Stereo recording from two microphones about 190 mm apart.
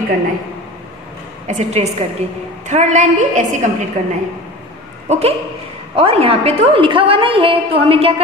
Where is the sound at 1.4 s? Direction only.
35° right (ahead or behind).